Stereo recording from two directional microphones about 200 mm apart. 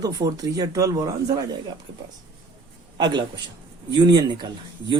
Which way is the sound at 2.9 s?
20° right (ahead or behind).